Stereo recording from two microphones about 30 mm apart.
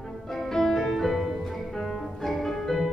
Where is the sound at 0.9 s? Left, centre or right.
Centre.